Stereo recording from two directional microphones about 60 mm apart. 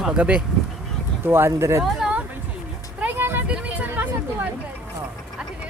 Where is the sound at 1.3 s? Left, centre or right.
Right.